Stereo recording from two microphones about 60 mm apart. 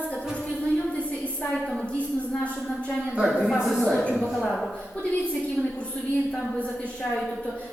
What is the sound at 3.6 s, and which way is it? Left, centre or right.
A man's voice, centre.